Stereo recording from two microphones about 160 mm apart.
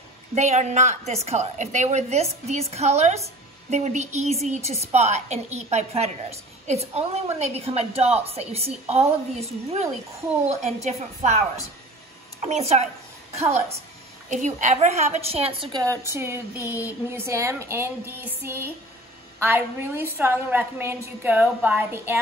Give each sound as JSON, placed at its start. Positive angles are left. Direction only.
{"t": 0.3, "sound": "a woman's voice", "side_deg": -45}
{"t": 15.7, "sound": "speech", "side_deg": -20}